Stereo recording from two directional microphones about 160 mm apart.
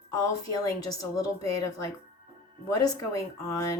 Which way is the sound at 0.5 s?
20° left (ahead or behind).